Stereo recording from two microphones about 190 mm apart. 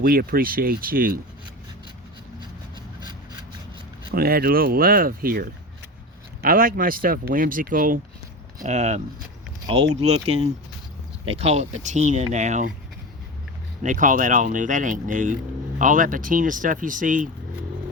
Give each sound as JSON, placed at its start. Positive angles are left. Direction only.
{"t": 0.0, "sound": "speech", "side_deg": -50}
{"t": 4.1, "sound": "speech", "side_deg": -50}
{"t": 13.8, "sound": "speech", "side_deg": -45}